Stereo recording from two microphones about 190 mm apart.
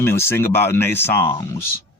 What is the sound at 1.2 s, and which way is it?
Speech, 25° left (ahead or behind).